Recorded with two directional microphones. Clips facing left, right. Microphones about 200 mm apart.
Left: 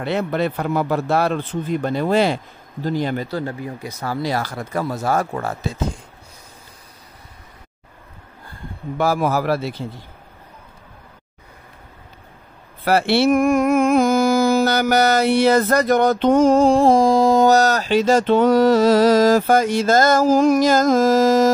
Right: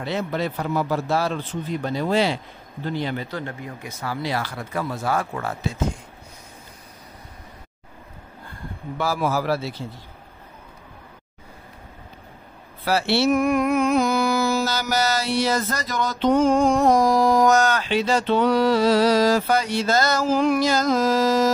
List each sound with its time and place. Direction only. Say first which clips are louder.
0.0 s a man's voice: left 4 dB; 60° left (ahead or behind); by 5.8 s 40° left (ahead or behind)
8.9 s a man's voice: left 4 dB; 50° left (ahead or behind)
12.8 s a sound: left 4 dB; 55° left (ahead or behind); by 17.5 s 25° left (ahead or behind)
17.5 s a man's voice: left 4 dB; 40° left (ahead or behind)